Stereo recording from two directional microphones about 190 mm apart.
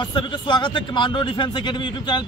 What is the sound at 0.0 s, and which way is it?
A man's voice, 25° left (ahead or behind).